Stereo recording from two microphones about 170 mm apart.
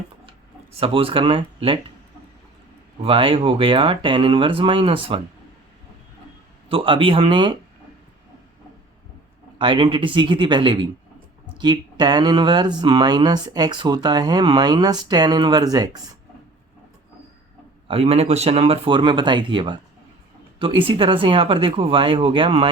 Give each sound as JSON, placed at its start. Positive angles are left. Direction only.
{"t": 0.8, "sound": "speech", "side_deg": -30}
{"t": 3.0, "sound": "speech", "side_deg": -30}
{"t": 6.7, "sound": "speech", "side_deg": -30}
{"t": 9.6, "sound": "speech", "side_deg": -30}
{"t": 17.8, "sound": "speech", "side_deg": -35}